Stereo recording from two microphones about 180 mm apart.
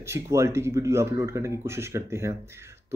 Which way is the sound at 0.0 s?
15° right (ahead or behind).